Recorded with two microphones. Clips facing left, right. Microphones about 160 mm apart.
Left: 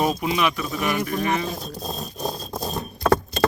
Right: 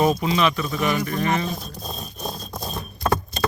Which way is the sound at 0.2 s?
10° left (ahead or behind).